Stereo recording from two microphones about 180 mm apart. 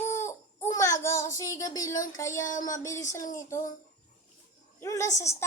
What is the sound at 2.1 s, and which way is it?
Speech, 15° left (ahead or behind).